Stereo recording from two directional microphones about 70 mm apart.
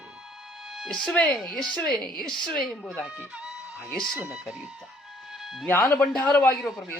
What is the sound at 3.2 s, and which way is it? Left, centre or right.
Speech, centre.